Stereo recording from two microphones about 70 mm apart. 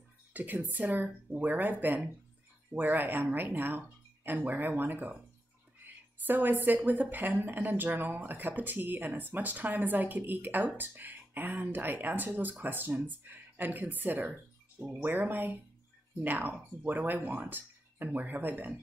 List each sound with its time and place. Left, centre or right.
0.3 s speech: right
6.2 s speech: right